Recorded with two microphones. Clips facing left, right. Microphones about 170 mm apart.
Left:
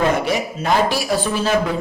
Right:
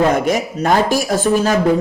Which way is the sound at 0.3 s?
45° right (ahead or behind).